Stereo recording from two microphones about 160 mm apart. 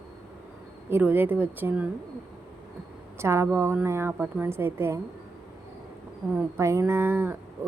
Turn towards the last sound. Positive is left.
turn(degrees=-15)  # may be behind; listen again after turning